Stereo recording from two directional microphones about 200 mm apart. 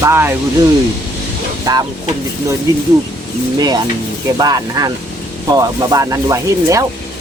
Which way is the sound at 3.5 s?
20° right (ahead or behind).